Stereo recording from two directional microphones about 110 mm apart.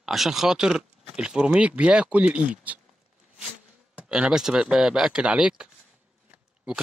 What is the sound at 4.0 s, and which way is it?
Speech, 10° right (ahead or behind).